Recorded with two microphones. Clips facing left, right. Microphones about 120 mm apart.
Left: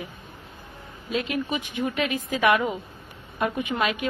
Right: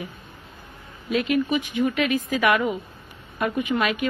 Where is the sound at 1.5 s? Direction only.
20° left (ahead or behind).